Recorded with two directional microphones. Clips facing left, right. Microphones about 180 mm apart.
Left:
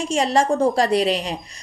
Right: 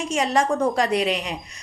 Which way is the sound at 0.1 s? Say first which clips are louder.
Left 2 dB; 30° left (ahead or behind).